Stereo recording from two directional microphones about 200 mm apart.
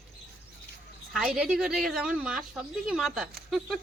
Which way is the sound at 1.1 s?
5° right (ahead or behind).